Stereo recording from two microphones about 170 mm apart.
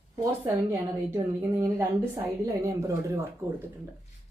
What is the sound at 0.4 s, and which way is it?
A woman's voice, 10° right (ahead or behind).